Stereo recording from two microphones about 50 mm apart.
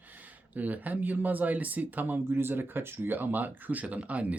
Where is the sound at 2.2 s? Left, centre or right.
Right.